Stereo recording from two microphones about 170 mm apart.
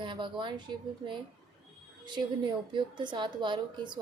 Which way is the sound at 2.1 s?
25° right (ahead or behind).